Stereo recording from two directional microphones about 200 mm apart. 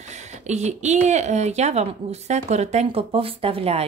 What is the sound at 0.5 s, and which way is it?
A woman's voice, 35° right (ahead or behind).